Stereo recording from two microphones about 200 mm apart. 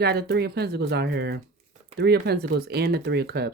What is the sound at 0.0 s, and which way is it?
Speech, 55° right (ahead or behind).